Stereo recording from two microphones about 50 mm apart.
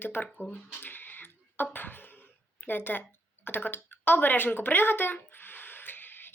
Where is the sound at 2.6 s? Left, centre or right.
Left.